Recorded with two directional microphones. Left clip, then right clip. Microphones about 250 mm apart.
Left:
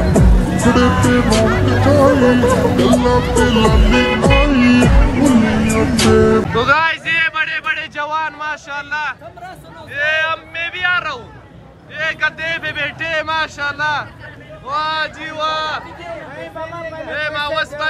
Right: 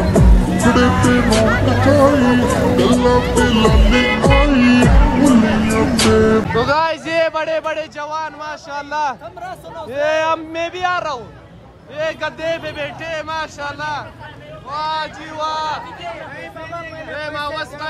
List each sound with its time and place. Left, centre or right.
0.0 s speech: centre
6.7 s a sound: centre
9.9 s a man's voice: right
17.1 s a man's voice: centre